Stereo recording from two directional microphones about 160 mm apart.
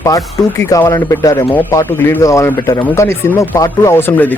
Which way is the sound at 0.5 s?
15° left (ahead or behind).